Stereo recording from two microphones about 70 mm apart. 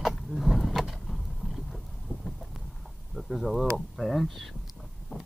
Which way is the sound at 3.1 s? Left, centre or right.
Centre.